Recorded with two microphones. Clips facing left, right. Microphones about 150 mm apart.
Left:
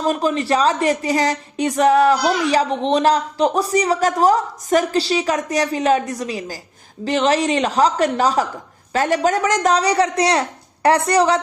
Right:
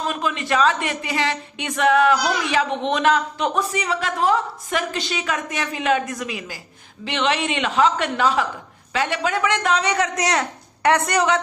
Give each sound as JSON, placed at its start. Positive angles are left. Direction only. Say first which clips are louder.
{"t": 0.0, "sound": "a woman's voice", "louder": "left 6 dB", "side_deg": 35}